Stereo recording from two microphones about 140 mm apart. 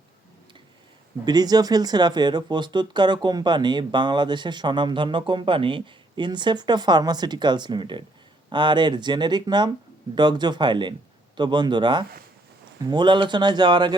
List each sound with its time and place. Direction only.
1.2 s speech: 30° right (ahead or behind)